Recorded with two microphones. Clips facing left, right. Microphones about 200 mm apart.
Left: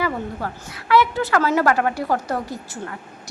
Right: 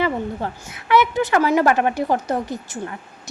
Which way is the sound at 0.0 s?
20° right (ahead or behind).